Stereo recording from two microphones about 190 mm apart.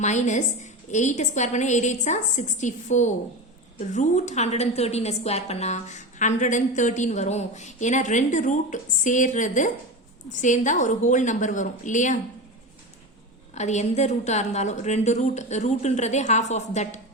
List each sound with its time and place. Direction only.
0.0 s a woman's voice: 40° left (ahead or behind)
13.5 s a woman's voice: 35° left (ahead or behind)